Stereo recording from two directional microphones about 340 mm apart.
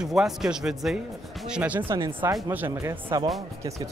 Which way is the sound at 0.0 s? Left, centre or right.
Centre.